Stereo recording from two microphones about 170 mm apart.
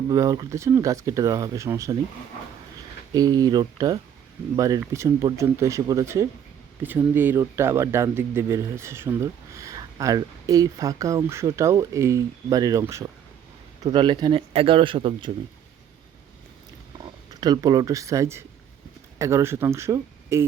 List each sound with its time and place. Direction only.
0.1 s speech: 20° right (ahead or behind)
3.1 s speech: 20° right (ahead or behind)
17.0 s speech: 25° right (ahead or behind)